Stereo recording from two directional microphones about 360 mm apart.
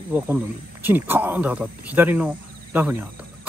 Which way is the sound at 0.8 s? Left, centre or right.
Centre.